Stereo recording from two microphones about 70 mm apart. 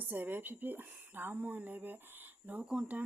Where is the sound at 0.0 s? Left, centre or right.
Right.